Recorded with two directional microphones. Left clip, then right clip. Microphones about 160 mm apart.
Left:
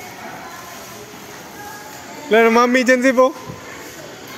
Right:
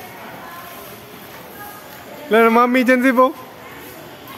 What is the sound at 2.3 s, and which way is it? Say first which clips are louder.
Speech: even; 15° right (ahead or behind).